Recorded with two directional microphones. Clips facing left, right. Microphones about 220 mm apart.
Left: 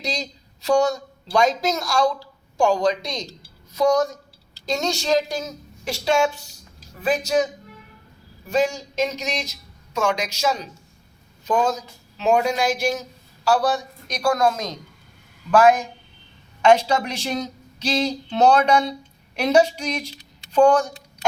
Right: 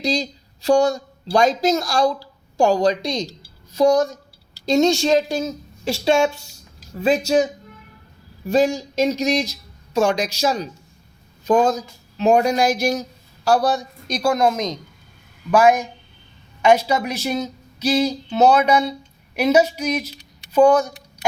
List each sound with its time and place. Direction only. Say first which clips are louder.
0.0 s a woman's voice: right 7 dB; 30° right (ahead or behind)
8.4 s speech: right 4 dB; 35° right (ahead or behind)
14.2 s a woman's voice: right 2 dB; 20° right (ahead or behind)